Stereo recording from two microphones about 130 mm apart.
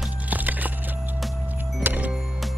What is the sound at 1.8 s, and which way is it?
Music, 10° right (ahead or behind).